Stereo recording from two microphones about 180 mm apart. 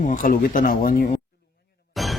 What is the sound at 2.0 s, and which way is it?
Music, centre (ahead or behind).